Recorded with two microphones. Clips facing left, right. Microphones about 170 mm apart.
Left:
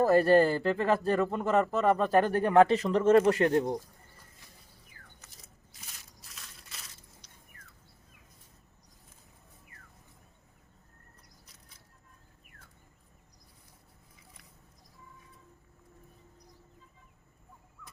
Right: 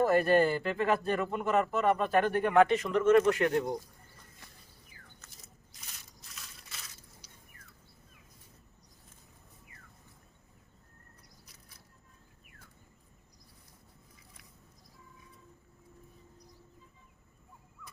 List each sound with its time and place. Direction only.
0.0 s speech: 35° left (ahead or behind)
5.4 s crushing: centre (ahead or behind)